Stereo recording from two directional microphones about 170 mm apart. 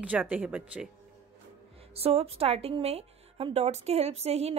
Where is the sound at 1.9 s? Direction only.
35° right (ahead or behind).